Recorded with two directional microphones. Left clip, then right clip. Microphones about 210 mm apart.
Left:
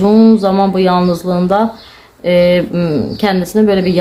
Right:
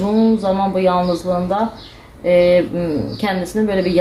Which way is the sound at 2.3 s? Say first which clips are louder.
Left 2 dB; 40° left (ahead or behind).